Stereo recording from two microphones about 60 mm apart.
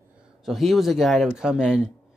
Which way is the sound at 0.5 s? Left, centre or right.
Centre.